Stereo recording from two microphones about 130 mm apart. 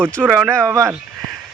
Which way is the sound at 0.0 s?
10° left (ahead or behind).